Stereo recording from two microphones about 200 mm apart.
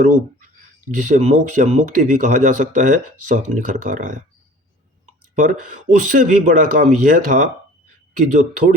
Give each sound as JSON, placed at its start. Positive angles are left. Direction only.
{"t": 0.0, "sound": "speech", "side_deg": -40}
{"t": 5.3, "sound": "speech", "side_deg": -40}